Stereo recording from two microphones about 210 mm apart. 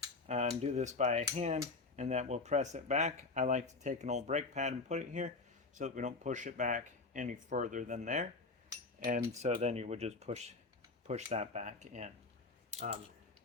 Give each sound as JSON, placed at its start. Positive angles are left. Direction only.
{"t": 0.3, "sound": "speech", "side_deg": -30}
{"t": 9.4, "sound": "speech", "side_deg": -30}